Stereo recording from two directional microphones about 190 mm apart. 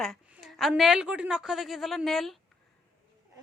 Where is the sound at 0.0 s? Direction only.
Centre (ahead or behind).